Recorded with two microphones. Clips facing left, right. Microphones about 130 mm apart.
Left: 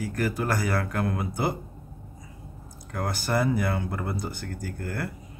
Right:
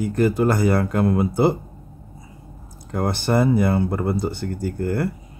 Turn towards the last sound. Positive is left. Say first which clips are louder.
# right 10 dB
turn(degrees=-25)  # may be behind; listen again after turning